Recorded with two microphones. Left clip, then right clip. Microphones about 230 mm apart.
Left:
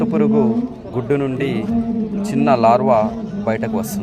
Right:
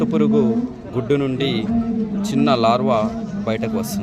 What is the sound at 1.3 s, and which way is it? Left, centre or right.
Speech, left.